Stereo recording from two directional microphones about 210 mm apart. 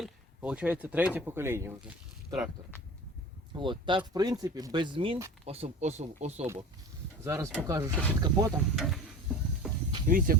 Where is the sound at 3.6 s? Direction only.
20° right (ahead or behind).